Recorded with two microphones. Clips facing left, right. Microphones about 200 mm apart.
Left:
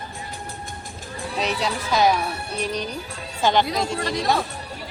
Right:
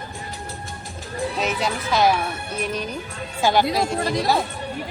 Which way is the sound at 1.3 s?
Centre (ahead or behind).